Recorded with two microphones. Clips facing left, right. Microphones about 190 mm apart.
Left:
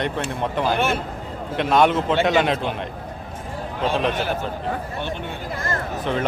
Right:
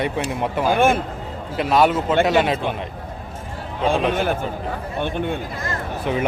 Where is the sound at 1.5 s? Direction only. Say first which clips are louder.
Even; 5° right (ahead or behind).